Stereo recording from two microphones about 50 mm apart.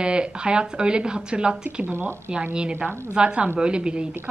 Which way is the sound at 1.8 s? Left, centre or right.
Right.